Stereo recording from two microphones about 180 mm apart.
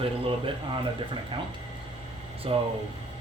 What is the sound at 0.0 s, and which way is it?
Speech, 30° right (ahead or behind).